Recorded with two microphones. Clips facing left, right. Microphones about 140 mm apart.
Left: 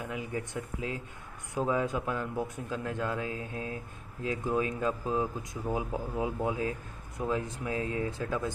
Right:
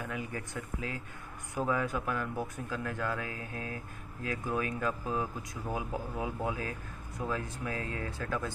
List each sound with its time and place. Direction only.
0.0 s speech: 20° left (ahead or behind)